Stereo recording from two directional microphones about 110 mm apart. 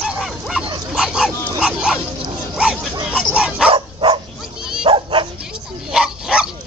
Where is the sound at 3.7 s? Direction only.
55° right (ahead or behind).